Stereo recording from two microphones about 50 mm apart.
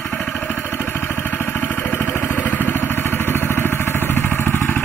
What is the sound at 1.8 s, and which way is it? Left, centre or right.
Vehicle, left.